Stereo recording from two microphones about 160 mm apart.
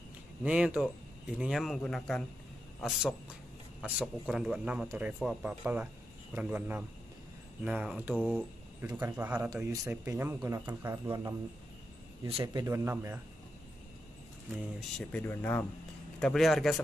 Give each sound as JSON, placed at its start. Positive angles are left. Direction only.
{"t": 0.4, "sound": "speech", "side_deg": -5}
{"t": 8.9, "sound": "speech", "side_deg": -15}
{"t": 12.3, "sound": "speech", "side_deg": -35}
{"t": 12.6, "sound": "speech", "side_deg": -20}
{"t": 14.8, "sound": "speech", "side_deg": 0}